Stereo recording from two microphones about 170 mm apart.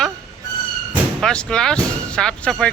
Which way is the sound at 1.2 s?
5° left (ahead or behind).